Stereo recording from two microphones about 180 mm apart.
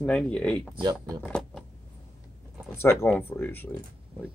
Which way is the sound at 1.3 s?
5° left (ahead or behind).